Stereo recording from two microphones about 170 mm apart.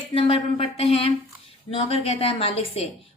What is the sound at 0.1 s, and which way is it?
A woman's voice, 35° left (ahead or behind).